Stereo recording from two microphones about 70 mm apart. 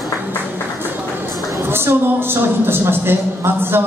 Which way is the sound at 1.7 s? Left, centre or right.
Right.